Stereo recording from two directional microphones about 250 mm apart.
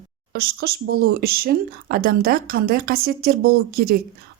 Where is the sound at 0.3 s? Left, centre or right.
Right.